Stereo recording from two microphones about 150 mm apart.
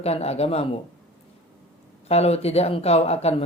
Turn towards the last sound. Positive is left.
turn(degrees=45)  # may be behind; listen again after turning